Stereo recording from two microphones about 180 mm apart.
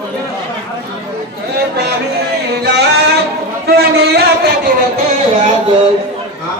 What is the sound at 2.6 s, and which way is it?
Singing, 70° right (ahead or behind).